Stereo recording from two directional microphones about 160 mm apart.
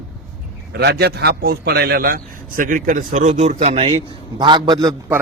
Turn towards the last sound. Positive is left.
turn(degrees=-25)  # may be behind; listen again after turning